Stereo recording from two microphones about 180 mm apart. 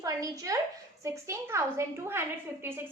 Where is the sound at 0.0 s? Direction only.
20° right (ahead or behind).